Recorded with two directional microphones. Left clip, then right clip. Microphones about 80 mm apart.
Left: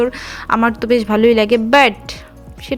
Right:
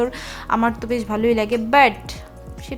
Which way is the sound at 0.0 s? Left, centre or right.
Centre.